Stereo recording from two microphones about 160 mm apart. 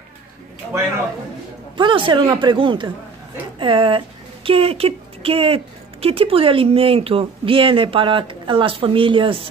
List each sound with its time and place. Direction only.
1.8 s speech: 30° right (ahead or behind)